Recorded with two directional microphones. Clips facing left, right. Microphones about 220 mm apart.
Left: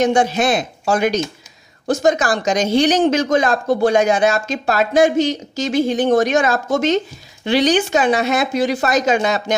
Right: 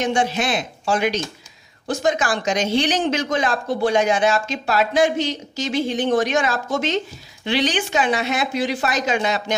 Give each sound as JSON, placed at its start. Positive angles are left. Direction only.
{"t": 0.0, "sound": "speech", "side_deg": 40}